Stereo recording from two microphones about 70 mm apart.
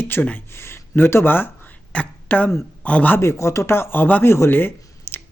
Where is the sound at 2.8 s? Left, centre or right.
Centre.